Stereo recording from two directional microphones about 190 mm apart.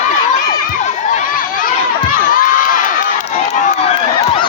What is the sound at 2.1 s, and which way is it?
Crowd, 45° left (ahead or behind).